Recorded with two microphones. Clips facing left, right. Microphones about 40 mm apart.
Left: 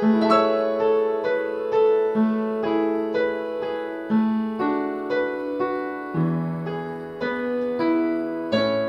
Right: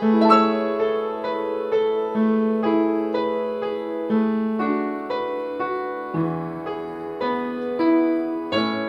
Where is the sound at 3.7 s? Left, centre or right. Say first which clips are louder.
Right 1 dB; centre.